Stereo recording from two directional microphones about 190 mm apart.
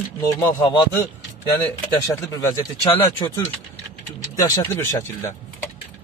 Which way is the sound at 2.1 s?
15° left (ahead or behind).